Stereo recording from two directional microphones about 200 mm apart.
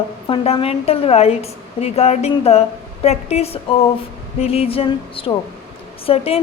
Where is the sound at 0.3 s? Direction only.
30° left (ahead or behind).